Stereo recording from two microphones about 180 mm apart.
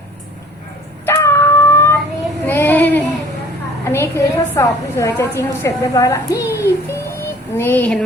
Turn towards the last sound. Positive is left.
turn(degrees=10)  # may be behind; listen again after turning